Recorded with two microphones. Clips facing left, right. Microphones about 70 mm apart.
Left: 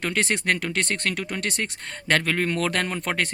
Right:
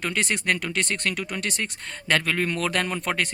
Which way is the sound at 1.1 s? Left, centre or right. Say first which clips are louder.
Left 1 dB; left.